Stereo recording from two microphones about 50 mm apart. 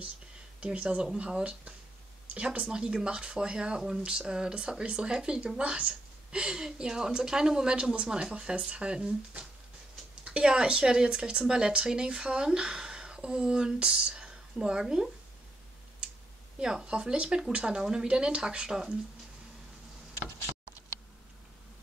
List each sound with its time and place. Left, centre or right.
0.6 s speech: right
9.3 s a sound: right
10.2 s speech: centre
16.8 s speech: centre